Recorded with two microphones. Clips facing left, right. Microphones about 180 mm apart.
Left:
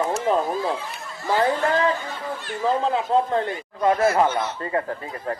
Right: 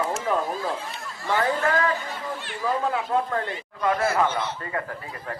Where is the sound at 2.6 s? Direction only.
25° left (ahead or behind).